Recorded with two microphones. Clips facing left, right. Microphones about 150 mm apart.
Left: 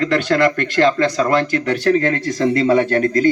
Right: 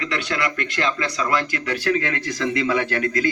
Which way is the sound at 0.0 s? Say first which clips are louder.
Left 10 dB; 45° left (ahead or behind).